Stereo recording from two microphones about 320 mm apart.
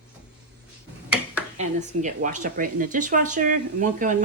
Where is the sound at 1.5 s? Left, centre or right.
Right.